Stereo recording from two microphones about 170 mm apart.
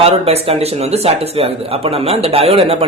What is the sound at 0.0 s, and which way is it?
Speech, 35° right (ahead or behind).